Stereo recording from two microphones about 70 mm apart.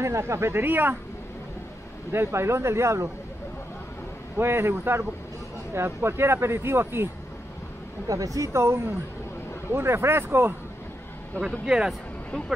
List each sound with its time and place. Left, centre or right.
0.0 s speech: right
2.1 s speech: right
4.4 s speech: right
8.1 s speech: right
11.6 s speech: centre